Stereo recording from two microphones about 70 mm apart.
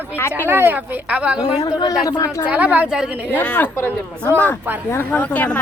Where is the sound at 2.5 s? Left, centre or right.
Right.